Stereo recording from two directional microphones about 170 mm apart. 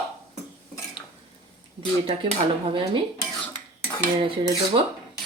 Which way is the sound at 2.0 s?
30° right (ahead or behind).